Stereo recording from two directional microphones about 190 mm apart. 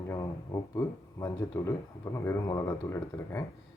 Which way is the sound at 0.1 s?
15° left (ahead or behind).